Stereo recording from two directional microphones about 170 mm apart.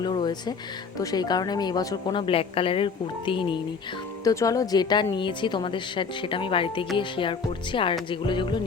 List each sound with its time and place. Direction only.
0.0 s a woman's voice: 25° left (ahead or behind)